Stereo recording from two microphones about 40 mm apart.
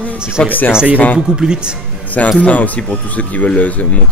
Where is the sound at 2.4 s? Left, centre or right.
Left.